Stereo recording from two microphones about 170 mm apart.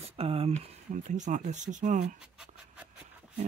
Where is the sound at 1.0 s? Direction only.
45° right (ahead or behind).